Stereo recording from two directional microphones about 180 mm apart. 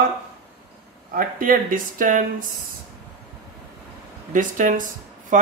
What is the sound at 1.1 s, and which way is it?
Speech, 50° right (ahead or behind).